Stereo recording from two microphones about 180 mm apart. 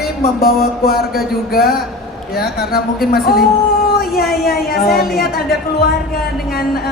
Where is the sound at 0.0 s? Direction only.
55° left (ahead or behind).